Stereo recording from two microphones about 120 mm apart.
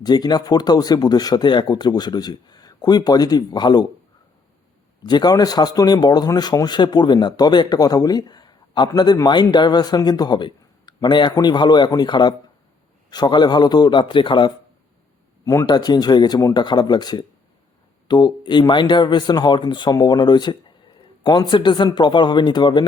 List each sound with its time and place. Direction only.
0.0 s speech: 35° left (ahead or behind)
5.0 s speech: 35° left (ahead or behind)
15.4 s speech: 30° left (ahead or behind)